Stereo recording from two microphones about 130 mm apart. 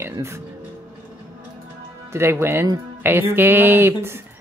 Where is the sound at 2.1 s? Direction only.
20° right (ahead or behind).